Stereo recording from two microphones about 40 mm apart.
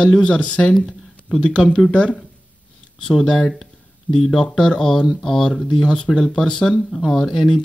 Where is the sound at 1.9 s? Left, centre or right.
Left.